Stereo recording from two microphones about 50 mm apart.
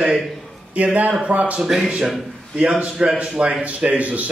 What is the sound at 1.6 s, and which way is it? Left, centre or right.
Speech, centre.